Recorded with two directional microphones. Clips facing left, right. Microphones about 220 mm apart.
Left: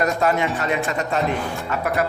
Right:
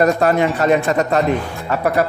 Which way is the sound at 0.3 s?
40° right (ahead or behind).